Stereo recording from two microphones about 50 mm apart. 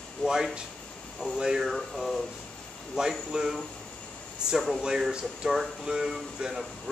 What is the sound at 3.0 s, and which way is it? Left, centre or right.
Speech, centre.